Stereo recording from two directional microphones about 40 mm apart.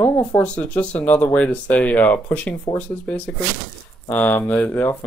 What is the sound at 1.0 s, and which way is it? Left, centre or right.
Speech, left.